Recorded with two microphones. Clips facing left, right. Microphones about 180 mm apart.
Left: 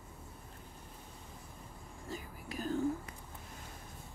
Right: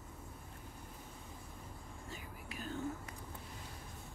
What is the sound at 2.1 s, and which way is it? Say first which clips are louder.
Vehicle: left 7 dB; 40° left (ahead or behind).